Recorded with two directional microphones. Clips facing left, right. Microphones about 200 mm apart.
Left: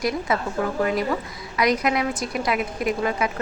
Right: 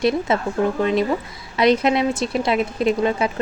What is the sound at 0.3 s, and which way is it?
Speech, 25° right (ahead or behind).